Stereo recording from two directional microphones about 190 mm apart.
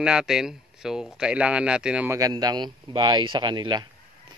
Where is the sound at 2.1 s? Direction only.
20° right (ahead or behind).